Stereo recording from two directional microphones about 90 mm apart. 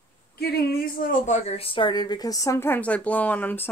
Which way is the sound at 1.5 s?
85° left.